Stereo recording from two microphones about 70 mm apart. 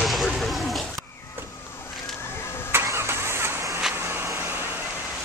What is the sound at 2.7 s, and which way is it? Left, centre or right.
Vehicle, right.